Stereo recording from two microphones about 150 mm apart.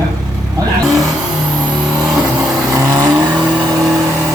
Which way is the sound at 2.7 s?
25° right (ahead or behind).